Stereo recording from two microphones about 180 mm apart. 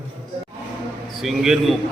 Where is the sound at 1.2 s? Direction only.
Centre (ahead or behind).